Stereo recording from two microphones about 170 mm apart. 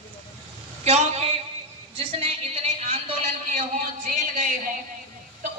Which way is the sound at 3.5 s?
50° right (ahead or behind).